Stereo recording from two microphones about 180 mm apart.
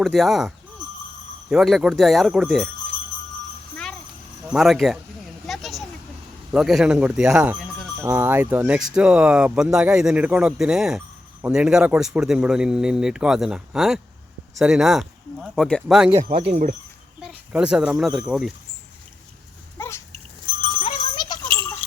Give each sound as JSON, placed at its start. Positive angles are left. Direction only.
{"t": 0.0, "sound": "speech", "side_deg": 0}
{"t": 4.4, "sound": "speech", "side_deg": 0}
{"t": 5.5, "sound": "a sound", "side_deg": 0}
{"t": 6.5, "sound": "speech", "side_deg": 0}
{"t": 16.3, "sound": "speech", "side_deg": -65}
{"t": 17.2, "sound": "speech", "side_deg": -5}
{"t": 20.5, "sound": "goat", "side_deg": 50}
{"t": 20.8, "sound": "music", "side_deg": 30}